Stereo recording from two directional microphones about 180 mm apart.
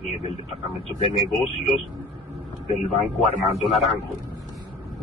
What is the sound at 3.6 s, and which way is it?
Speech, centre (ahead or behind).